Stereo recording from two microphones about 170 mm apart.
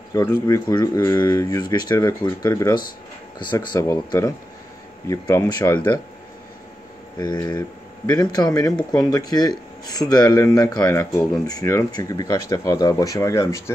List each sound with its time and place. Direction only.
0.1 s speech: 20° left (ahead or behind)
7.2 s speech: 20° left (ahead or behind)